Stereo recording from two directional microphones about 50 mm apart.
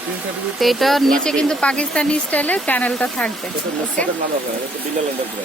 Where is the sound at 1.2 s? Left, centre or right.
Centre.